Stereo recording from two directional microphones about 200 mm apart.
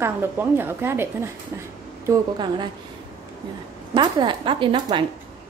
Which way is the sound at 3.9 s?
25° right (ahead or behind).